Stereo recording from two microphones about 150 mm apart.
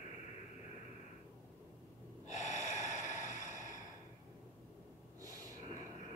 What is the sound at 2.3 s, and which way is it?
Gasp, 50° left (ahead or behind).